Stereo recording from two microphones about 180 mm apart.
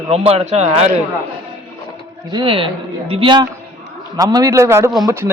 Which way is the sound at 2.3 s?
25° right (ahead or behind).